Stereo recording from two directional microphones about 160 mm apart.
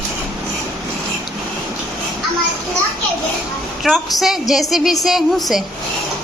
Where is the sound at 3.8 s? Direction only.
Centre (ahead or behind).